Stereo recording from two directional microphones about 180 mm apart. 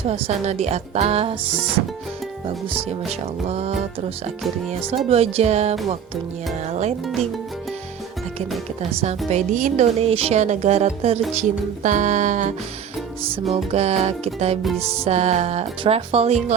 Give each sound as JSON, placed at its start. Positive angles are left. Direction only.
{"t": 0.1, "sound": "speech", "side_deg": -35}
{"t": 2.7, "sound": "speech", "side_deg": -35}
{"t": 5.0, "sound": "speech", "side_deg": -35}
{"t": 8.8, "sound": "speech", "side_deg": -35}